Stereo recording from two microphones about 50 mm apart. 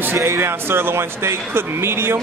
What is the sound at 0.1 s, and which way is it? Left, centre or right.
A man's voice, right.